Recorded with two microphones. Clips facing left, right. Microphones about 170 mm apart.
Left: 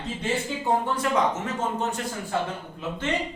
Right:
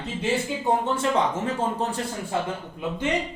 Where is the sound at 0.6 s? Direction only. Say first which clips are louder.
Right 1 dB; 25° right (ahead or behind).